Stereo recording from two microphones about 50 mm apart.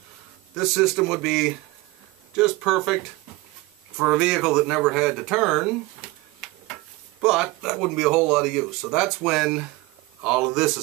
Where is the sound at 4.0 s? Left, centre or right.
Centre.